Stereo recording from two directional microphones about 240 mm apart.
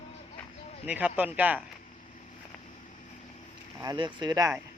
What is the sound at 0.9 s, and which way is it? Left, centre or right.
Speech, centre.